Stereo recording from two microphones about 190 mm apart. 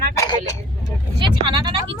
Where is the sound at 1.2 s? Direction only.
25° right (ahead or behind).